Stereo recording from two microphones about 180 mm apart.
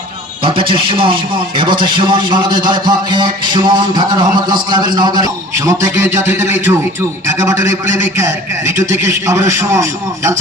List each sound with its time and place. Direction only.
0.4 s a man's voice: 30° right (ahead or behind)